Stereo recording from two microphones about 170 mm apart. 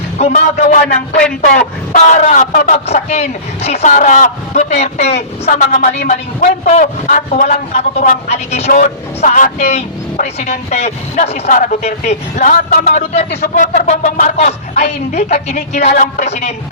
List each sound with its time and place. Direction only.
0.2 s a man's voice: 40° left (ahead or behind)
2.7 s a man's voice: 40° left (ahead or behind)
5.5 s speech: 50° left (ahead or behind)
8.7 s speech: 50° left (ahead or behind)